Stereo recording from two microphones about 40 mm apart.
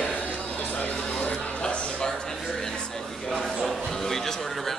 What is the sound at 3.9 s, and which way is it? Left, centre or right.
Music, centre.